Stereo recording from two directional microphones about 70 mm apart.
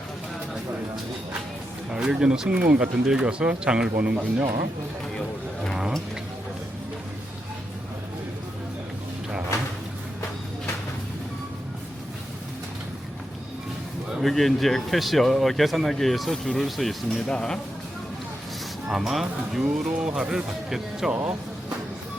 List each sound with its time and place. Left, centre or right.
1.9 s speech: centre
14.1 s speech: centre
18.9 s speech: centre